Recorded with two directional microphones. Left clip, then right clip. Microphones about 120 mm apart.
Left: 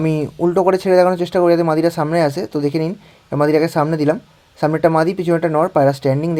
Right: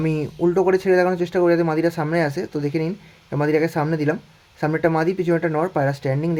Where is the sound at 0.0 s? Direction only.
30° left (ahead or behind).